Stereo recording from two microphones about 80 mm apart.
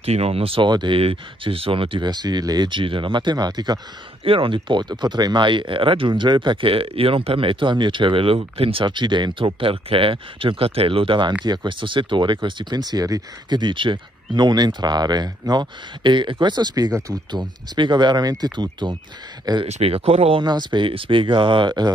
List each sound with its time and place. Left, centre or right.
0.6 s speech: right
11.4 s speech: right
13.6 s speech: right